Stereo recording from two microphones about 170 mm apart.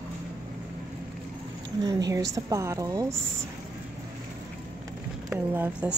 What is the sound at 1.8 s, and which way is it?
A woman's voice, 20° right (ahead or behind).